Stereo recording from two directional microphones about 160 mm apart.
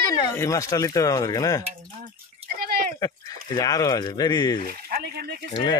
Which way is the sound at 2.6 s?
75° right (ahead or behind).